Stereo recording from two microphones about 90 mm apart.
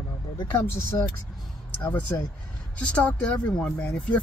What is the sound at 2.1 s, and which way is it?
Speech, 25° left (ahead or behind).